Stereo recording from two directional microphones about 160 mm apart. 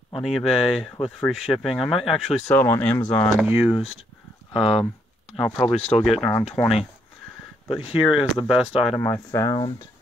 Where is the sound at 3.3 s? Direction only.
10° right (ahead or behind).